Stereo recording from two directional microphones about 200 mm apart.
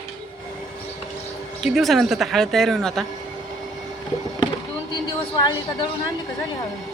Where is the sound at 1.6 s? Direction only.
Centre (ahead or behind).